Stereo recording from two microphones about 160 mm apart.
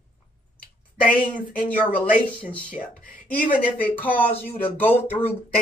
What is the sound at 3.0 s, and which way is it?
Speech, 60° left (ahead or behind).